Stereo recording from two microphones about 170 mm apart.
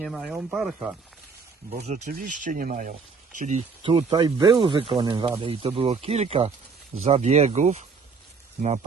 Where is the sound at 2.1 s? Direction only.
55° right (ahead or behind).